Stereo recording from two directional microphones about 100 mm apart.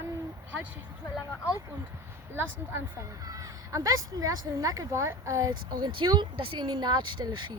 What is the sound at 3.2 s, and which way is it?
Speech, 35° right (ahead or behind).